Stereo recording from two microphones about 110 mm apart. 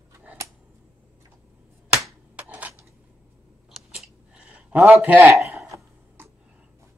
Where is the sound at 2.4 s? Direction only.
15° right (ahead or behind).